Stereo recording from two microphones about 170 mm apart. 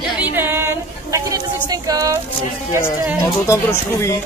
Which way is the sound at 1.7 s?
20° right (ahead or behind).